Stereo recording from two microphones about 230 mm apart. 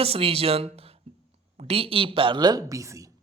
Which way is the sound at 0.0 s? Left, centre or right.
Right.